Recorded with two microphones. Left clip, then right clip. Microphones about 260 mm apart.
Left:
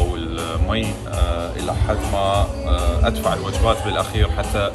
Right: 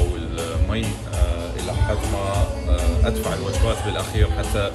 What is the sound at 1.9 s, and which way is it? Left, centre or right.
Speech, centre.